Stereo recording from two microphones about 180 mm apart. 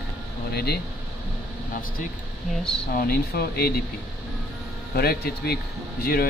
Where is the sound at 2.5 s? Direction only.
5° left (ahead or behind).